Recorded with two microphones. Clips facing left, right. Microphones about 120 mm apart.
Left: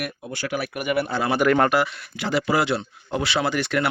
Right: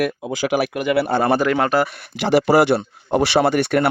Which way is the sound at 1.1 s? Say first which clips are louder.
Right 3 dB; 55° right (ahead or behind).